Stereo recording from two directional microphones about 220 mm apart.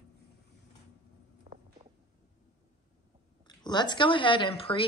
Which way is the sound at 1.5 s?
35° right (ahead or behind).